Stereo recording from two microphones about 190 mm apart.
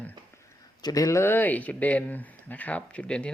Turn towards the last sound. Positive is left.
turn(degrees=5)  # may be behind; listen again after turning